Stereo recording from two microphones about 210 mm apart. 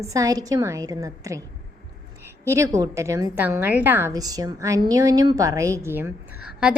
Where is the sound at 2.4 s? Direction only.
15° right (ahead or behind).